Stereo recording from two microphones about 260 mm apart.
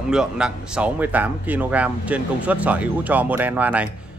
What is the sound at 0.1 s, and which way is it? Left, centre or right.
Speech, centre.